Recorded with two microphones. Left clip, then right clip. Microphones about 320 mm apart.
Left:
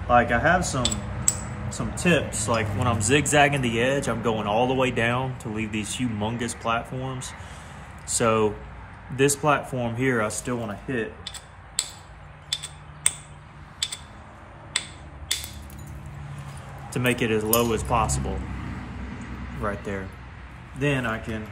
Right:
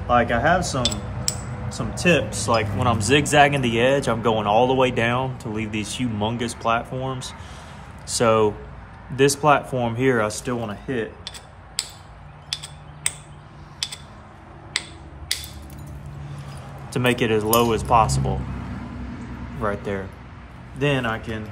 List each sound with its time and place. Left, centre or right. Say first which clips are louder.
0.1 s speech: right 1 dB; centre
16.9 s speech: right 4 dB; centre
19.6 s speech: right 4 dB; centre